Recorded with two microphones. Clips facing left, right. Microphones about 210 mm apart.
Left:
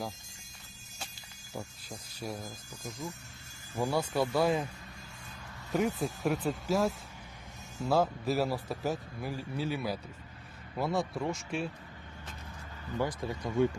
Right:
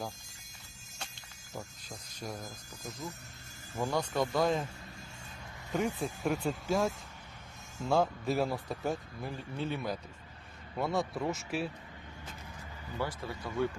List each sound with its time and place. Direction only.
2.1 s speech: 5° left (ahead or behind)
3.8 s speech: 10° left (ahead or behind)
5.7 s speech: 5° left (ahead or behind)
13.0 s speech: 15° left (ahead or behind)